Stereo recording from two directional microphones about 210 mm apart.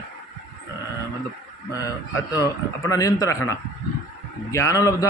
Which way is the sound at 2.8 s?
15° left (ahead or behind).